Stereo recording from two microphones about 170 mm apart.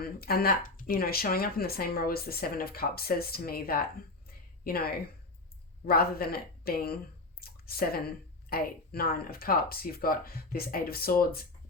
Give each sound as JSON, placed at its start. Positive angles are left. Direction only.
{"t": 0.0, "sound": "speech", "side_deg": 60}
{"t": 4.3, "sound": "a sound", "side_deg": 65}
{"t": 5.8, "sound": "speech", "side_deg": 60}